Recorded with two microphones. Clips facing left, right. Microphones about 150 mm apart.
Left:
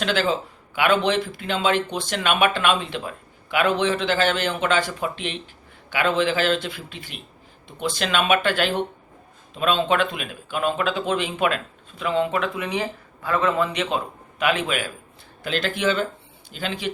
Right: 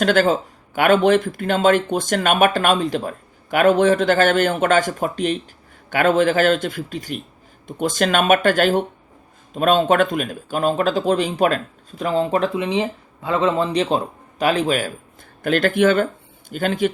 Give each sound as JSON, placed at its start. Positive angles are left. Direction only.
{"t": 0.0, "sound": "speech", "side_deg": -50}
{"t": 12.6, "sound": "speech", "side_deg": -20}
{"t": 15.4, "sound": "speech", "side_deg": -50}